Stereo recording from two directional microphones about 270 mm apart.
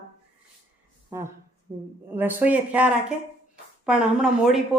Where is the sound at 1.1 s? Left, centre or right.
Centre.